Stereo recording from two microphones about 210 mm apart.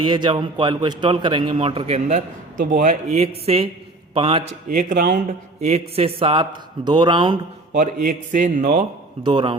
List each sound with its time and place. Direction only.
0.0 s a man's voice: 20° right (ahead or behind)
4.7 s a man's voice: 40° right (ahead or behind); by 7.8 s 25° right (ahead or behind)
7.8 s a man's voice: 40° right (ahead or behind)
9.2 s a man's voice: 25° right (ahead or behind)